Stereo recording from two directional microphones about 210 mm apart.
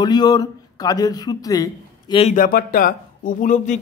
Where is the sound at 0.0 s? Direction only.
20° left (ahead or behind).